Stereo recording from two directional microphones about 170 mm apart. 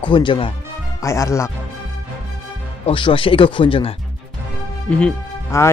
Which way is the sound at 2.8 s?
30° left (ahead or behind).